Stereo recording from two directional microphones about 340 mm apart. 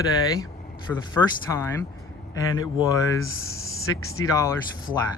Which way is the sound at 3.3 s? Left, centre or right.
Left.